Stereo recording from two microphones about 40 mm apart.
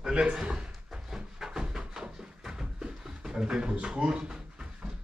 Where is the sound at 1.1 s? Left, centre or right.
Centre.